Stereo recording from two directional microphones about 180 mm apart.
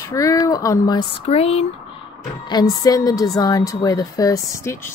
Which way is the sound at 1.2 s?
35° left (ahead or behind).